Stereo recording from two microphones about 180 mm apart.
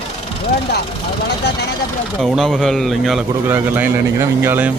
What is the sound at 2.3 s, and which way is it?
Speech, centre (ahead or behind).